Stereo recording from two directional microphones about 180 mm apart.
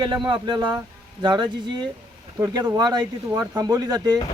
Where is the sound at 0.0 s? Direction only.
25° right (ahead or behind).